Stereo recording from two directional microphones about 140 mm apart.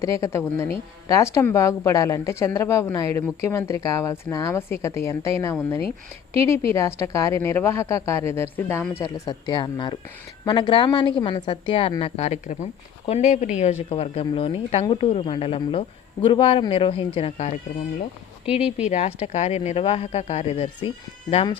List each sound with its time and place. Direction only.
0.0 s speech: 20° left (ahead or behind)
9.2 s a woman's voice: 30° left (ahead or behind)
18.9 s speech: 50° left (ahead or behind)